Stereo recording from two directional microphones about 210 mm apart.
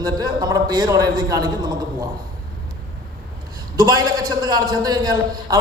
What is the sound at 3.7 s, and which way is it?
A man's voice, 20° right (ahead or behind).